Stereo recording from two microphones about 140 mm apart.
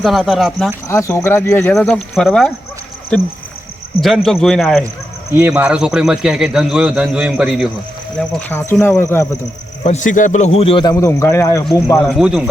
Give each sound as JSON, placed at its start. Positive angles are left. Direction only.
{"t": 0.0, "sound": "a man's voice", "side_deg": 0}
{"t": 0.9, "sound": "speech", "side_deg": 20}
{"t": 1.7, "sound": "a man's voice", "side_deg": 5}
{"t": 5.3, "sound": "a man's voice", "side_deg": -15}
{"t": 8.2, "sound": "speech", "side_deg": 5}
{"t": 9.8, "sound": "a man's voice", "side_deg": 60}
{"t": 10.9, "sound": "speech", "side_deg": 20}
{"t": 12.2, "sound": "a man's voice", "side_deg": -10}